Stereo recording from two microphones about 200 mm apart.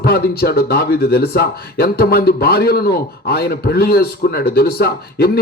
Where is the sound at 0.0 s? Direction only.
50° left (ahead or behind).